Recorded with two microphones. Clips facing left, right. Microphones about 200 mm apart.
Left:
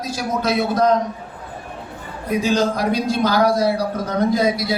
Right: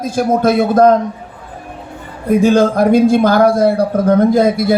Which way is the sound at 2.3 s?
55° right (ahead or behind).